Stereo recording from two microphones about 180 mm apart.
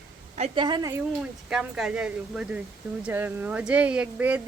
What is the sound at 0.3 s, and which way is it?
Speech, 30° right (ahead or behind).